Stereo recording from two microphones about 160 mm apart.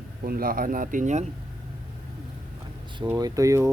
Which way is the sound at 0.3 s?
65° right (ahead or behind).